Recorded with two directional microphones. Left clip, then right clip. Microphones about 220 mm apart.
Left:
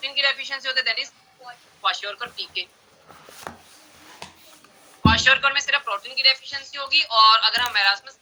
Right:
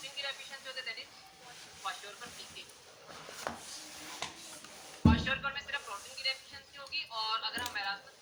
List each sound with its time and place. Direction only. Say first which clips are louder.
0.0 s speech: left 18 dB; 45° left (ahead or behind)
3.5 s a sound: left 3 dB; 50° left (ahead or behind)
5.0 s speech: left 15 dB; 45° left (ahead or behind)